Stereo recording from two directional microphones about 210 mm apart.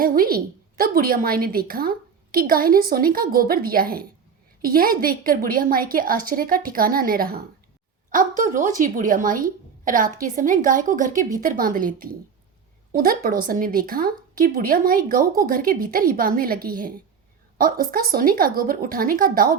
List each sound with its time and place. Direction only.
0.0 s a woman's voice: 45° right (ahead or behind)